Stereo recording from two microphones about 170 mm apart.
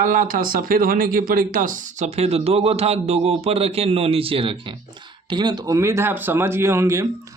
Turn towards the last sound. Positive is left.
turn(degrees=-15)  # may be behind; listen again after turning